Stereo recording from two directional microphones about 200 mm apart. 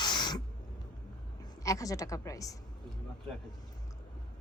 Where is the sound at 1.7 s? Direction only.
15° left (ahead or behind).